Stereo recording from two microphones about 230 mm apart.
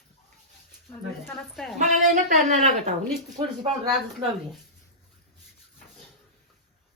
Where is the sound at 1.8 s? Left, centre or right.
Right.